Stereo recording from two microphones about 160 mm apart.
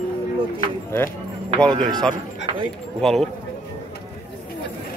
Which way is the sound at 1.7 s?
30° right (ahead or behind).